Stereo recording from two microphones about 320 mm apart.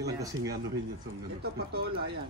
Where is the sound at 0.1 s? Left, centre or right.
Centre.